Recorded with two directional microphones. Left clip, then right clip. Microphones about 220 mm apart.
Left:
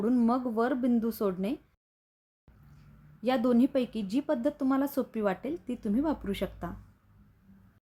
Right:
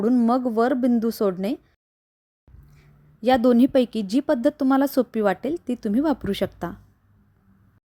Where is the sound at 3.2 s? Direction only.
35° right (ahead or behind).